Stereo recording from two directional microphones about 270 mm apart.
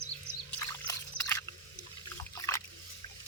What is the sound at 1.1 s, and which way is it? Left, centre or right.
Biting, centre.